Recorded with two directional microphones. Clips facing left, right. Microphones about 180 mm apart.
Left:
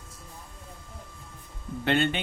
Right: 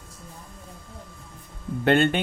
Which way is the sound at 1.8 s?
50° right (ahead or behind).